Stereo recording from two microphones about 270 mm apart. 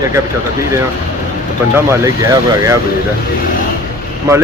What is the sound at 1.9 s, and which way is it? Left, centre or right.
Speech, centre.